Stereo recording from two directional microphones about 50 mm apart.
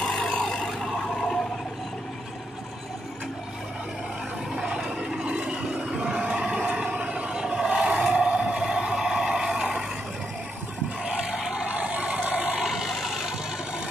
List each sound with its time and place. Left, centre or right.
0.0 s vehicle: centre
0.3 s vehicle: left
0.7 s vehicle: centre
4.6 s vehicle: centre
11.1 s vehicle: centre
12.6 s a sound: centre